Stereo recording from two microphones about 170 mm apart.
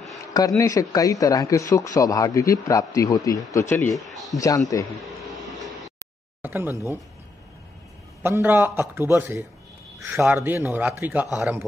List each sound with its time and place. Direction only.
0.6 s speech: 20° left (ahead or behind)
3.9 s a man's voice: centre (ahead or behind)
4.4 s speech: 20° left (ahead or behind)
6.4 s speech: 10° right (ahead or behind)
8.2 s a man's voice: 15° right (ahead or behind)